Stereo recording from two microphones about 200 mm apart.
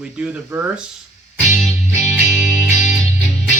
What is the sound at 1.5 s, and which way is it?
Music, 35° left (ahead or behind).